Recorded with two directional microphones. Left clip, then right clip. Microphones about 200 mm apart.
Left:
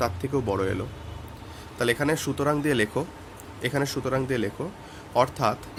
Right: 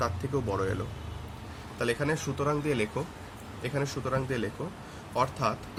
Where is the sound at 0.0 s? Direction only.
40° left (ahead or behind).